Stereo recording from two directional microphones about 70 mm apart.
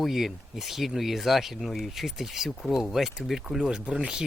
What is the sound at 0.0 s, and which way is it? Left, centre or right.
Speech, centre.